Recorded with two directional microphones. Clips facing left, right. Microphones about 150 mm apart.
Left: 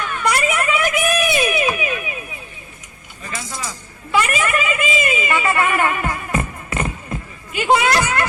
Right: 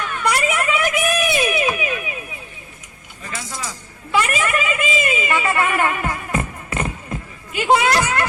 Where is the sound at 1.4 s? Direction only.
25° right (ahead or behind).